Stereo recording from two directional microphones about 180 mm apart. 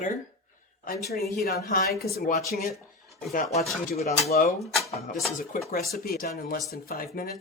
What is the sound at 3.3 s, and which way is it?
Speech, 45° left (ahead or behind).